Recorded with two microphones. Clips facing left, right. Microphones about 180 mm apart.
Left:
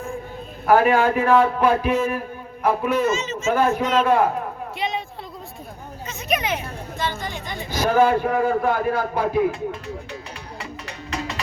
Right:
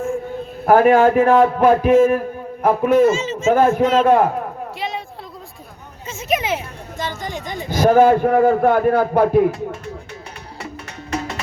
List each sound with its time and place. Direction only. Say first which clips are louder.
0.6 s a man's voice: right 5 dB; 45° right (ahead or behind)
3.1 s speech: right 5 dB; 30° right (ahead or behind)
3.5 s a man's voice: right 5 dB; 45° right (ahead or behind)
4.8 s a sound: left 1 dB; centre (ahead or behind)
6.1 s a sound: right 3 dB; 25° right (ahead or behind)
7.0 s a man's voice: right 2 dB; 45° right (ahead or behind)
10.8 s music: right 4 dB; 50° right (ahead or behind)